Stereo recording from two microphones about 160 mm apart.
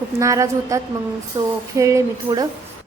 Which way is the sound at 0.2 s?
20° right (ahead or behind).